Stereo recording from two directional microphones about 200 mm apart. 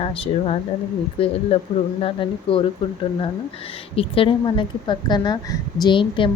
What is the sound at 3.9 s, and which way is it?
Speech, 30° left (ahead or behind).